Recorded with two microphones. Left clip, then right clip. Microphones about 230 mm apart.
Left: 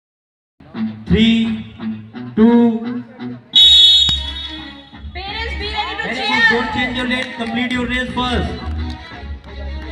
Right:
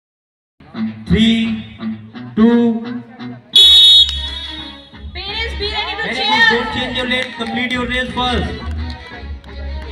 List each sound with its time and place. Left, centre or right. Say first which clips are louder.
0.7 s music: even; right; by 9.8 s centre